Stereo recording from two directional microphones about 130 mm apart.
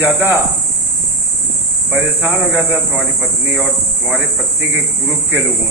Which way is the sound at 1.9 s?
15° right (ahead or behind).